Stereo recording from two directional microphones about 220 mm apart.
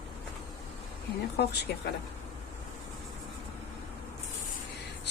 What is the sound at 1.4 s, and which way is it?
Speech, 50° left (ahead or behind).